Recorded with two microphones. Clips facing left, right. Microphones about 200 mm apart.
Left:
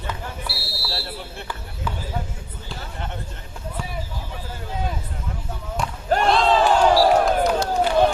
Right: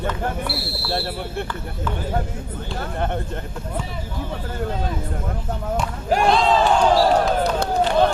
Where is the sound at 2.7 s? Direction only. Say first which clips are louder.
Right 9 dB; 55° right (ahead or behind).